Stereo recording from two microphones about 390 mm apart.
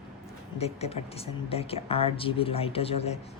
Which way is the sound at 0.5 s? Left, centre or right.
Centre.